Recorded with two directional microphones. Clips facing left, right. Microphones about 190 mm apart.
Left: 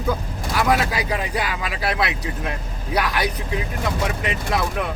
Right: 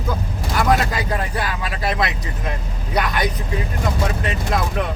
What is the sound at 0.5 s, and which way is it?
Speech, 10° left (ahead or behind).